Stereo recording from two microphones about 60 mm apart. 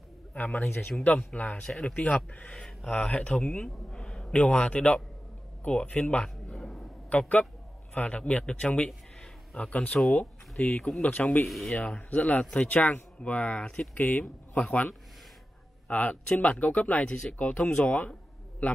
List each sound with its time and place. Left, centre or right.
0.6 s speech: left
0.9 s speech: left
3.6 s speech: centre
4.3 s speech: left
6.2 s a sound: centre
7.1 s a man's voice: left
11.4 s speech: centre
11.8 s speech: left